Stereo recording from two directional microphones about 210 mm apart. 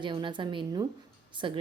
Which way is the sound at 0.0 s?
20° right (ahead or behind).